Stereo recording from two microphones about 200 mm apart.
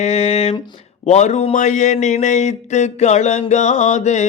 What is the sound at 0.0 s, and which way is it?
Speech, 30° left (ahead or behind).